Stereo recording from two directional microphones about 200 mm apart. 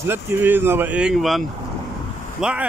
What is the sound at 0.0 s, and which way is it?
Speech, 10° right (ahead or behind).